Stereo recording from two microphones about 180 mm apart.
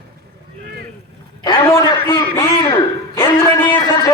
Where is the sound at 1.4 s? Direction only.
25° left (ahead or behind).